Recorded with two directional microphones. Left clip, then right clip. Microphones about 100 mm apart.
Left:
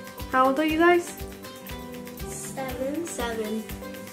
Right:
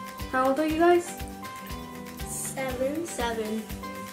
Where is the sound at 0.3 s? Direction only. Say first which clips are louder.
Left 3 dB; 35° left (ahead or behind).